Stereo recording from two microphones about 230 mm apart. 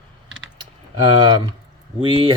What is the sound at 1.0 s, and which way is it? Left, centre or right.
Speech, centre.